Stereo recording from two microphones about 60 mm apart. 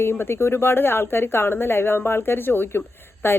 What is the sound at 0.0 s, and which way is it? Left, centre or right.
Speech, left.